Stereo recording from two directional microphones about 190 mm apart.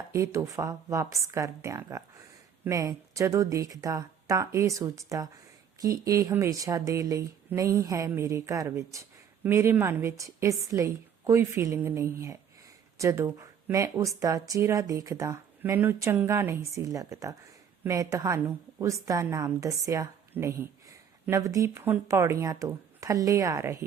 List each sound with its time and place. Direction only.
0.1 s a woman's voice: 15° right (ahead or behind)